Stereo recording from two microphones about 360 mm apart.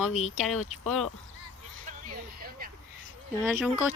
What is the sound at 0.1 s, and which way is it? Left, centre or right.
Speech, centre.